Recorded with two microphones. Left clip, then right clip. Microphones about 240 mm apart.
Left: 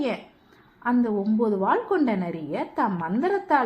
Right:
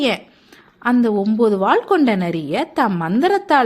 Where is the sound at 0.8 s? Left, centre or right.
Right.